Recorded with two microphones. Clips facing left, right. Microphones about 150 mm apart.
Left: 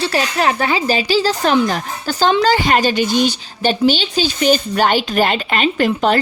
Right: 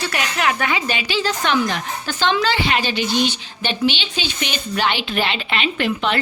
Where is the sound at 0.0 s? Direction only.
30° left (ahead or behind).